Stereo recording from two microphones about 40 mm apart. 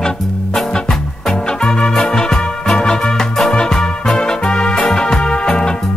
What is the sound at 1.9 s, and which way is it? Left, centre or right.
Music, centre.